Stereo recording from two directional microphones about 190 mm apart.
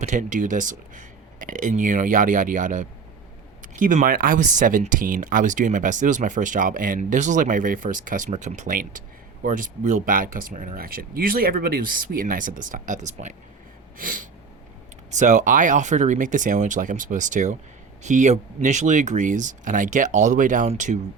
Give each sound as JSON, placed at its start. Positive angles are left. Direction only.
{"t": 0.0, "sound": "speech", "side_deg": -40}